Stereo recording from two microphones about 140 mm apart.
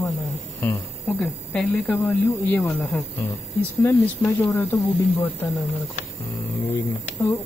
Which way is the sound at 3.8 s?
10° left (ahead or behind).